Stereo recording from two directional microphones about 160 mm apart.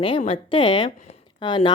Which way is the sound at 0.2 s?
35° left (ahead or behind).